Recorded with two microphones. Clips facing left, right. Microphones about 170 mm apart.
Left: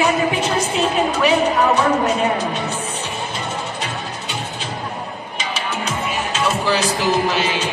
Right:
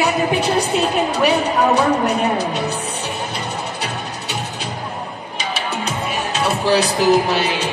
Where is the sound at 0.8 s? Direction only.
35° right (ahead or behind).